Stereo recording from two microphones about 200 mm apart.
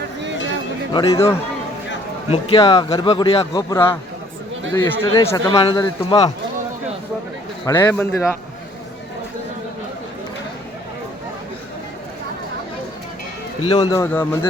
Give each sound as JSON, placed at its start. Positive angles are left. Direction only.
{"t": 0.9, "sound": "a man's voice", "side_deg": 15}
{"t": 7.7, "sound": "a man's voice", "side_deg": 10}
{"t": 13.7, "sound": "a man's voice", "side_deg": 25}